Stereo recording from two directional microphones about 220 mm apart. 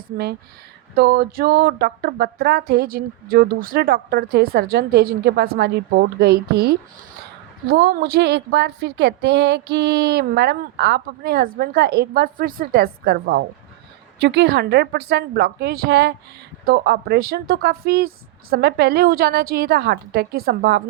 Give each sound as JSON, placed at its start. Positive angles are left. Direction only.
{"t": 0.9, "sound": "speech", "side_deg": -45}